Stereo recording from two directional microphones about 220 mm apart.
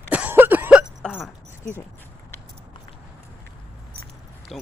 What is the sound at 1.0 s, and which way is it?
Hiccup, 5° left (ahead or behind).